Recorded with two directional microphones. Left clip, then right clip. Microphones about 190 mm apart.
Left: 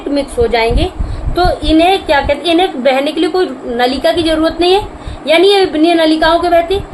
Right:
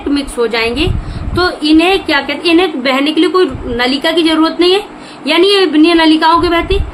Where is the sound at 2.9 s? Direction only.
50° right (ahead or behind).